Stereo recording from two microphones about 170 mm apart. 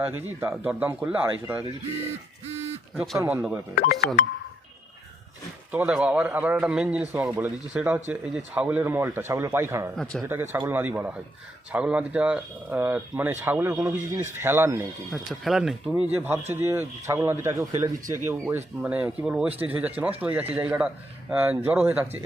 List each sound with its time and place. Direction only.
0.3 s speech: 10° right (ahead or behind)
2.0 s a sound: 40° right (ahead or behind)
2.9 s speech: centre (ahead or behind)
5.7 s speech: 5° right (ahead or behind)
10.0 s speech: 5° left (ahead or behind)
10.2 s speech: 15° right (ahead or behind)
15.1 s speech: centre (ahead or behind)